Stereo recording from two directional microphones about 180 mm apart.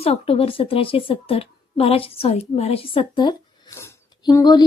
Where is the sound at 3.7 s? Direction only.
15° left (ahead or behind).